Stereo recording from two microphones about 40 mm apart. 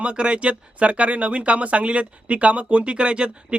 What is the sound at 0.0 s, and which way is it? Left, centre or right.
Speech, right.